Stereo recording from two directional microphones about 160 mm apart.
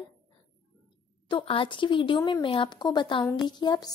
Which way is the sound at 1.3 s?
35° left (ahead or behind).